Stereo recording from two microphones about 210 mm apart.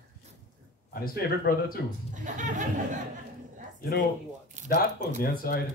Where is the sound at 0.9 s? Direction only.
45° left (ahead or behind).